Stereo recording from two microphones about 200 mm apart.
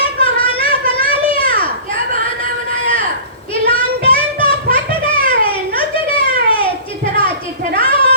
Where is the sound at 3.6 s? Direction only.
25° left (ahead or behind).